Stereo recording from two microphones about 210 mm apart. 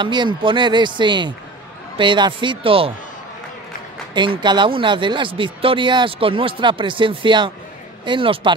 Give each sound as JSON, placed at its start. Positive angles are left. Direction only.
{"t": 0.0, "sound": "speech", "side_deg": -20}
{"t": 4.1, "sound": "speech", "side_deg": -20}